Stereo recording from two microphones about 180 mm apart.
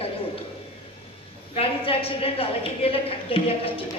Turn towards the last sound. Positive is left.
turn(degrees=30)  # may be behind; listen again after turning